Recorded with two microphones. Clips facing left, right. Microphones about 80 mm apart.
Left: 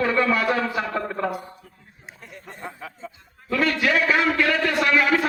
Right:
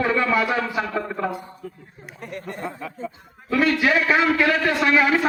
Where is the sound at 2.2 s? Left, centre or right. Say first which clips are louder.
Right 7 dB; right.